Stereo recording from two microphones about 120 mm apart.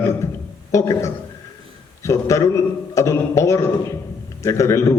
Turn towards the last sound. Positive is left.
turn(degrees=25)  # may be behind; listen again after turning